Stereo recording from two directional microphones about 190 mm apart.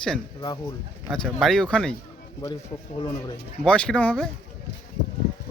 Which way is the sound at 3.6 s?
5° left (ahead or behind).